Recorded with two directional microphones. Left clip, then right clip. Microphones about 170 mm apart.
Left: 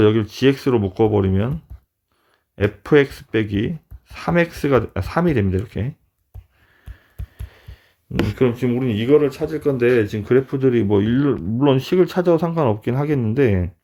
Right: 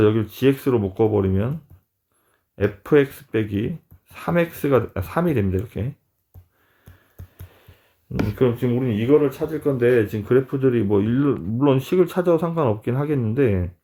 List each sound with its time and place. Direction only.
0.0 s speech: 35° left (ahead or behind)
2.6 s speech: 30° left (ahead or behind)
8.3 s speech: 40° left (ahead or behind)